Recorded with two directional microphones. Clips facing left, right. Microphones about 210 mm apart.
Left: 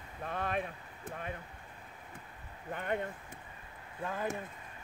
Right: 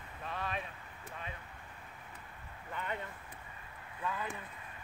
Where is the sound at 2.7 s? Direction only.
55° left (ahead or behind).